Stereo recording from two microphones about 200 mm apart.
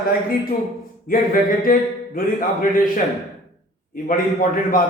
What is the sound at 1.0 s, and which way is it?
A man's voice, 45° left (ahead or behind).